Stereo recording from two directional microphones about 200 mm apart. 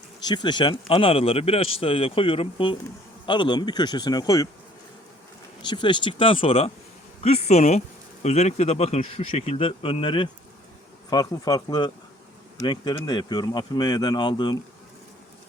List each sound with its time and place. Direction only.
0.2 s a man's voice: 20° left (ahead or behind)
5.6 s a man's voice: 25° left (ahead or behind)